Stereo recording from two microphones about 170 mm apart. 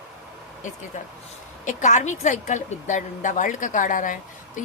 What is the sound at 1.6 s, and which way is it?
A woman's voice, 45° left (ahead or behind).